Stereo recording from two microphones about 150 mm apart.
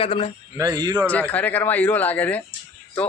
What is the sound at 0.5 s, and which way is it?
Speech, 25° right (ahead or behind).